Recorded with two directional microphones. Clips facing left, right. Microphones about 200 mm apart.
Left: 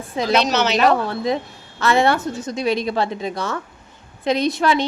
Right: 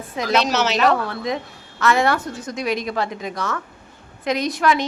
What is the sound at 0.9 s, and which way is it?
Speech, 30° left (ahead or behind).